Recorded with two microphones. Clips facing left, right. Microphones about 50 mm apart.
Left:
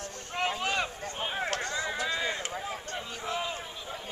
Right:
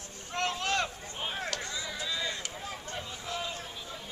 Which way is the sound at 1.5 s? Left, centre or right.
Left.